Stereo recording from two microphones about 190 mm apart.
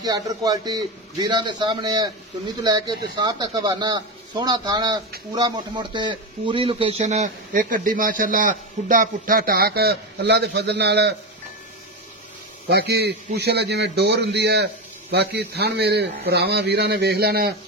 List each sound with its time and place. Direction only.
0.0 s a man's voice: 20° right (ahead or behind); by 11.1 s 60° right (ahead or behind)
12.6 s a man's voice: 60° right (ahead or behind)